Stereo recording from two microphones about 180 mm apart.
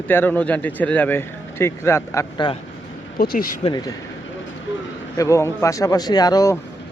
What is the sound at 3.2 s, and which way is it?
Speech, 55° left (ahead or behind).